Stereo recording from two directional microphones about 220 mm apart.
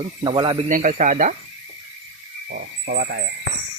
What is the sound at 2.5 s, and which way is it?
Speech, 45° right (ahead or behind).